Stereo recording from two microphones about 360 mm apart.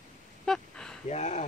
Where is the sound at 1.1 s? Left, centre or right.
Centre.